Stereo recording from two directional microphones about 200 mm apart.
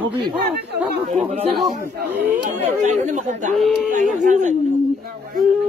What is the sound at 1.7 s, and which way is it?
Speech, 50° right (ahead or behind).